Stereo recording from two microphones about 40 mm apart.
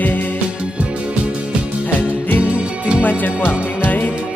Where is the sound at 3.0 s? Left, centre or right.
Left.